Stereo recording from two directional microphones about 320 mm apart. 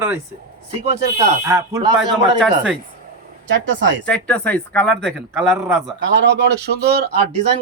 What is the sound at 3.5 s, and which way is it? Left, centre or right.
Speech, right.